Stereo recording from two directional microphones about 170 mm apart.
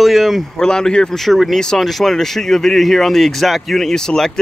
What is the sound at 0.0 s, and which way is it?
Speech, centre (ahead or behind).